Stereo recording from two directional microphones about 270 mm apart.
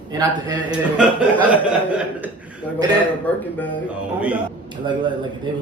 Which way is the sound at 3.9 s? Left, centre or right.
Centre.